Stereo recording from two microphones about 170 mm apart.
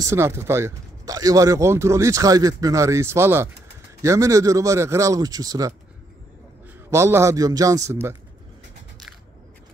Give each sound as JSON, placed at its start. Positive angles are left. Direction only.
{"t": 0.0, "sound": "speech", "side_deg": -15}
{"t": 6.9, "sound": "speech", "side_deg": -15}